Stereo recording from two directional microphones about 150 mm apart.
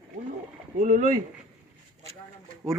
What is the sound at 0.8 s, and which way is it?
Speech, 55° right (ahead or behind).